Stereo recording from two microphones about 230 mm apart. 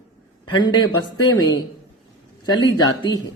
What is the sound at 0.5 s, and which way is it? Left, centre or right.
Speech, centre.